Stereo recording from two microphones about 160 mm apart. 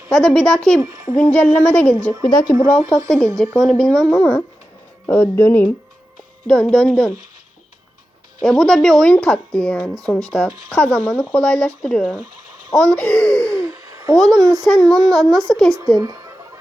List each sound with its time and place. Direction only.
0.1 s speech: 5° left (ahead or behind)
0.8 s speech: 20° right (ahead or behind)
1.3 s speech: 10° left (ahead or behind)
2.4 s speech: 15° right (ahead or behind)
2.9 s speech: 5° left (ahead or behind)
8.4 s speech: centre (ahead or behind)
13.5 s a sound: 20° right (ahead or behind)
14.3 s speech: 20° right (ahead or behind)
14.6 s speech: 5° left (ahead or behind)
16.0 s speech: 20° right (ahead or behind)